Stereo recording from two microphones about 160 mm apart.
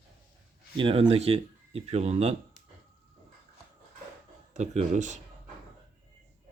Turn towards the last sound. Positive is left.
turn(degrees=-50)  # may be behind; listen again after turning